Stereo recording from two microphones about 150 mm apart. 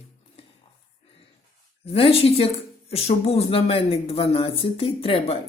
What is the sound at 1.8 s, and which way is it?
A woman's voice, 40° left (ahead or behind).